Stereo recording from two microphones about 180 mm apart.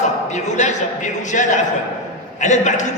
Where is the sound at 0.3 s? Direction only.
40° left (ahead or behind).